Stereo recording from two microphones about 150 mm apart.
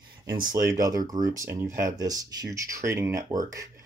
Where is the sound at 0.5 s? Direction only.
20° right (ahead or behind).